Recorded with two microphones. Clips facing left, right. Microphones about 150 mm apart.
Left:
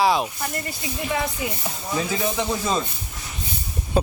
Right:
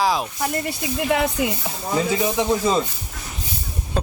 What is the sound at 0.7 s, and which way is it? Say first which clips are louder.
Speech: right 6 dB; 75° right (ahead or behind).